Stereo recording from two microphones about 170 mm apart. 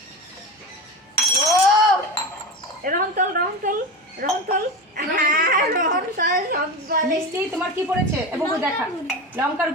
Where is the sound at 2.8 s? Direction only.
55° right (ahead or behind).